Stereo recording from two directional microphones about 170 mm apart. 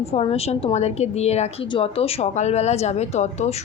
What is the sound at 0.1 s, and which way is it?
A woman's voice, 35° left (ahead or behind).